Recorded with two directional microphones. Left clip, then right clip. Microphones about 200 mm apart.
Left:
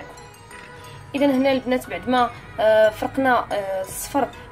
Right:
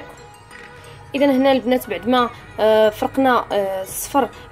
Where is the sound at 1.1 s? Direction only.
30° right (ahead or behind).